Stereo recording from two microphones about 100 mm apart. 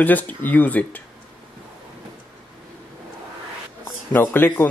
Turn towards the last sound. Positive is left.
turn(degrees=20)  # may be behind; listen again after turning